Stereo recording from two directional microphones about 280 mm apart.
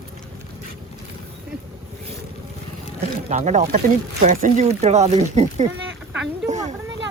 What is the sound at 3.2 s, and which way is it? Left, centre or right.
Speech, right.